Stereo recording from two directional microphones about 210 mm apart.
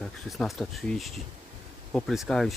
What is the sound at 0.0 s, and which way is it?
Speech, centre (ahead or behind).